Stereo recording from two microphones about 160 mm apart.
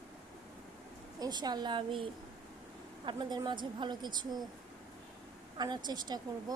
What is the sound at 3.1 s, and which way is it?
A woman's voice, 25° right (ahead or behind).